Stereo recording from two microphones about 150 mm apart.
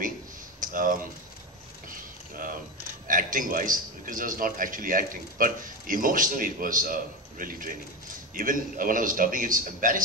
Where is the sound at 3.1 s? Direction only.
65° right (ahead or behind).